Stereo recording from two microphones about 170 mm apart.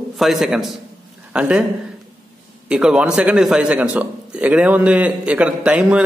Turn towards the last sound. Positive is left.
turn(degrees=-5)  # may be behind; listen again after turning